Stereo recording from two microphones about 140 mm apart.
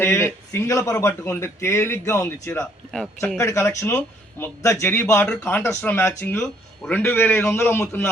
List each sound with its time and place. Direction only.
0.0 s a man's voice: 20° left (ahead or behind)